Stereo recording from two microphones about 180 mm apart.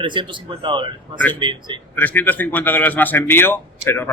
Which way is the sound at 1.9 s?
10° left (ahead or behind).